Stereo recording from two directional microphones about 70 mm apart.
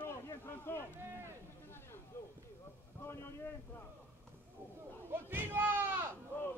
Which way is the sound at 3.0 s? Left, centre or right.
Left.